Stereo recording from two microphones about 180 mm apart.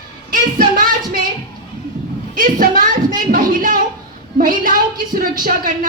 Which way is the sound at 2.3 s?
50° right (ahead or behind).